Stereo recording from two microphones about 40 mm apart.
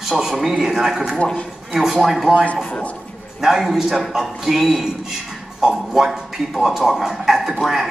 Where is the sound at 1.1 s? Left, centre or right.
Left.